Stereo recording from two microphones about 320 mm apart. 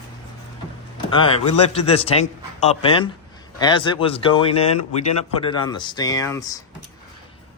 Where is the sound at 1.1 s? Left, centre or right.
Centre.